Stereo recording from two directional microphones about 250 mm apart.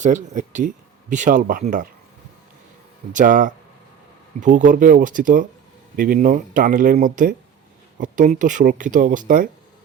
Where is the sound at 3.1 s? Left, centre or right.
Right.